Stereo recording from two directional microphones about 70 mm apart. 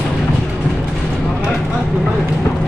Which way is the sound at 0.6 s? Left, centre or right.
Centre.